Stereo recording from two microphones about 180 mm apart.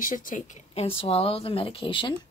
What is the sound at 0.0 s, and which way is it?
Speech, 50° left (ahead or behind).